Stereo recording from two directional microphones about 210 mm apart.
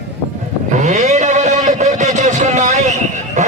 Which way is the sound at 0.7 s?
35° right (ahead or behind).